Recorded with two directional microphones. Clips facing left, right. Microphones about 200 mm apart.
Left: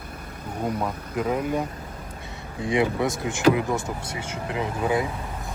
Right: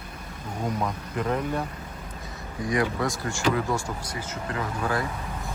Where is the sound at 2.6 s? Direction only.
25° left (ahead or behind).